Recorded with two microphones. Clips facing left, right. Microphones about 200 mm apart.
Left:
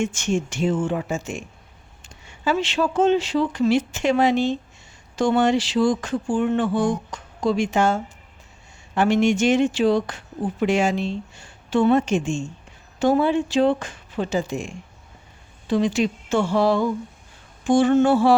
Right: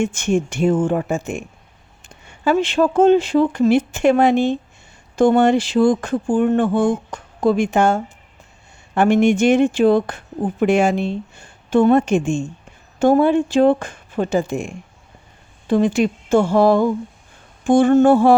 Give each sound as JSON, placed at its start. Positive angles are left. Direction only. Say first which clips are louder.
{"t": 0.0, "sound": "speech", "louder": "right 4 dB", "side_deg": -55}